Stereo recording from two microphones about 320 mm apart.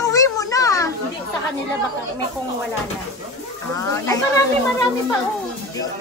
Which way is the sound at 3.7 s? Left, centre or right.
Centre.